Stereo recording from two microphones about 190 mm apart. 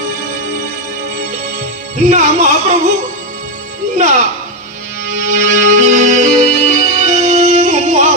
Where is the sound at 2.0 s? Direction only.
40° right (ahead or behind).